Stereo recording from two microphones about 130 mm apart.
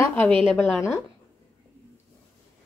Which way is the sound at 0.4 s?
Centre (ahead or behind).